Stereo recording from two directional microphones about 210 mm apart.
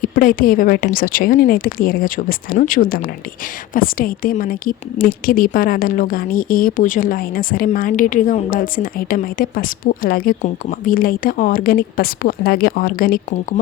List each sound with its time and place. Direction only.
0.0 s a woman's voice: 40° left (ahead or behind)